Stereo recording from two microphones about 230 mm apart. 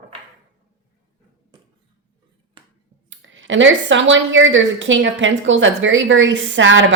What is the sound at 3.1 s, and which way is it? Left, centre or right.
Speech, right.